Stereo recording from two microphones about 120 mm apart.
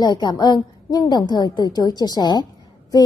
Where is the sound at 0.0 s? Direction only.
35° left (ahead or behind).